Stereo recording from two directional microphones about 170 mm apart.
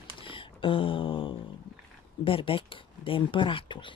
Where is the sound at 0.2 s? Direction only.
30° left (ahead or behind).